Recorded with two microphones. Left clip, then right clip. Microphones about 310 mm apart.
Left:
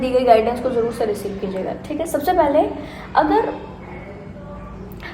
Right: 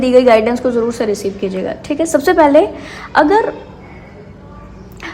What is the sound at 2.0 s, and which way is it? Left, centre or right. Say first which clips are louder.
Speech: right 7 dB; right.